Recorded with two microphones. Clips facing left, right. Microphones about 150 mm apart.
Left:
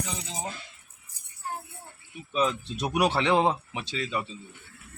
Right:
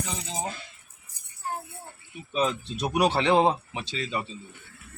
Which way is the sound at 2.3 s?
35° right (ahead or behind).